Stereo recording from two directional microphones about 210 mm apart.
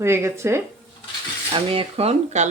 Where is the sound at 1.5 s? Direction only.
30° right (ahead or behind).